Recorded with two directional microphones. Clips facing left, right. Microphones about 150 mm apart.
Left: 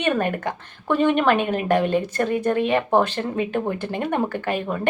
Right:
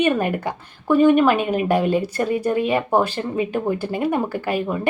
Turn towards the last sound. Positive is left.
turn(degrees=-10)  # may be behind; listen again after turning